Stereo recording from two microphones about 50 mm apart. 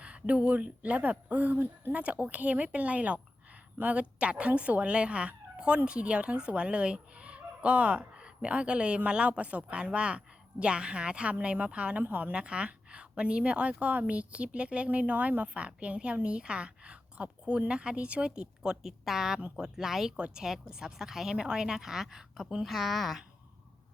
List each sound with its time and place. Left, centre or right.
0.0 s speech: right
1.9 s a woman's voice: right
4.2 s a woman's voice: right
12.0 s speech: right
12.3 s a woman's voice: right
20.1 s a woman's voice: centre